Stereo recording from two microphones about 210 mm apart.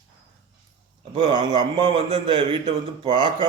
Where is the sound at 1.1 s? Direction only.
20° right (ahead or behind).